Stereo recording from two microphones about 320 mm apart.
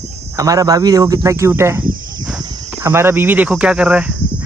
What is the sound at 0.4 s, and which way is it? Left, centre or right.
Speech, centre.